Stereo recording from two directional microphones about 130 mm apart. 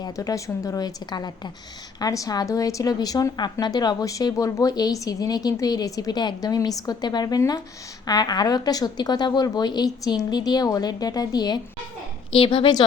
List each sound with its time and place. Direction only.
0.0 s a woman's voice: 25° left (ahead or behind)
12.3 s a woman's voice: 40° left (ahead or behind)